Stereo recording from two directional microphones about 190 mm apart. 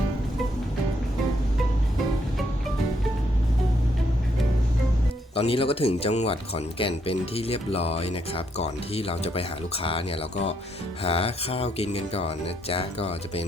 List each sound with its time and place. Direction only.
5.3 s speech: 30° left (ahead or behind)